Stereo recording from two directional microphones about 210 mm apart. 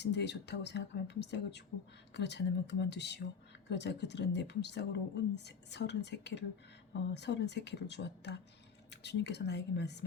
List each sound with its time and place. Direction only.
0.0 s a woman's voice: 55° left (ahead or behind)